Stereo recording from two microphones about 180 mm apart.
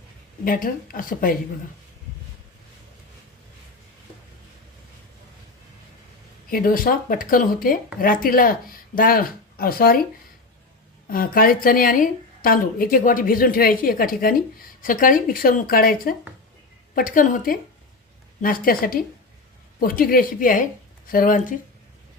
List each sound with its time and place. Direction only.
0.4 s a woman's voice: 50° left (ahead or behind)
6.5 s a woman's voice: 50° left (ahead or behind)
11.1 s a woman's voice: 50° left (ahead or behind)